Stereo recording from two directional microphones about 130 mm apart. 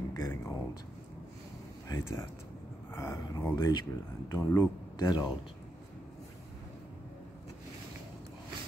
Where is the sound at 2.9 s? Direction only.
20° left (ahead or behind).